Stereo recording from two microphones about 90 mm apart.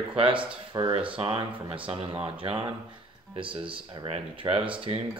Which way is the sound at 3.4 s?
75° right (ahead or behind).